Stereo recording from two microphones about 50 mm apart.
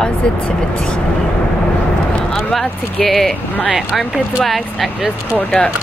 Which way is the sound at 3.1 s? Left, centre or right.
Centre.